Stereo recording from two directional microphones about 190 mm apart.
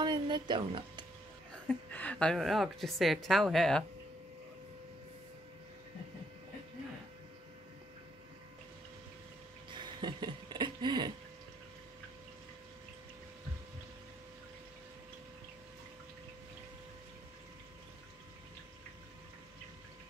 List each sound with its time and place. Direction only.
0.0 s music: 25° right (ahead or behind)
1.5 s a woman's voice: 10° left (ahead or behind)
9.7 s a sound: 25° right (ahead or behind)